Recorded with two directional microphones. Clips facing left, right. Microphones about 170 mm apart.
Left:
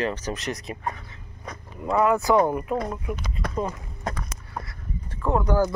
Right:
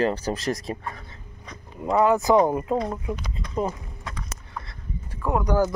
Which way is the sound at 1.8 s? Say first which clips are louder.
Right 1 dB; 25° right (ahead or behind).